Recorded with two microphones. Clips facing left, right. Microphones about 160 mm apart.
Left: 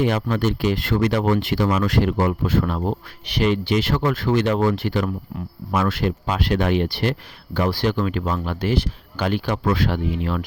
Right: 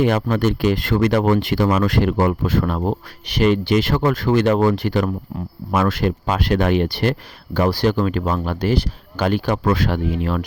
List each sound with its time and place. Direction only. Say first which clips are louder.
0.0 s speech: right 3 dB; 45° right (ahead or behind)